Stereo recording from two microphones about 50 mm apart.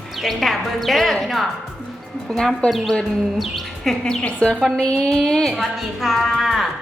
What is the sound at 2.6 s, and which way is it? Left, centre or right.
Speech, centre.